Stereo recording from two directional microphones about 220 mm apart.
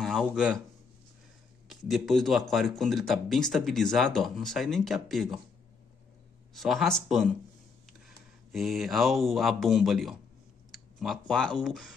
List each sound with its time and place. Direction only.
0.0 s speech: centre (ahead or behind)
1.7 s speech: centre (ahead or behind)
6.5 s speech: centre (ahead or behind)
8.5 s speech: centre (ahead or behind)